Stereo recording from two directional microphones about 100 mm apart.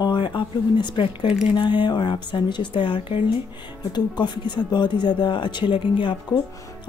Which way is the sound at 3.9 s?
50° left (ahead or behind).